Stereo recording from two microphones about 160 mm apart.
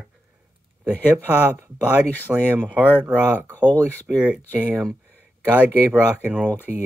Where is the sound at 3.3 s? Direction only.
10° left (ahead or behind).